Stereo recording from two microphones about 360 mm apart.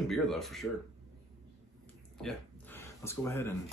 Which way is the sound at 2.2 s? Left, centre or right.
Centre.